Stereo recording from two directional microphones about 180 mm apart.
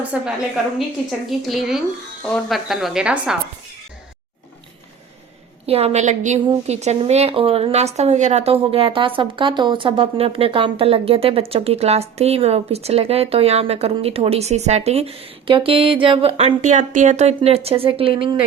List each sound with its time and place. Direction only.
0.0 s a woman's voice: 5° right (ahead or behind)
5.6 s a woman's voice: 35° right (ahead or behind)